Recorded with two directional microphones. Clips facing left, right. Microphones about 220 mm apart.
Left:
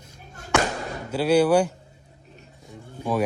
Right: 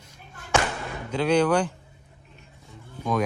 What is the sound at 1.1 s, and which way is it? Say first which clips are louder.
Speech: left 3 dB; 5° left (ahead or behind).